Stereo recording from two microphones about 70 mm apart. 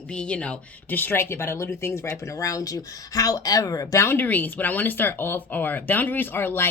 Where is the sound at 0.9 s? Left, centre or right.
Left.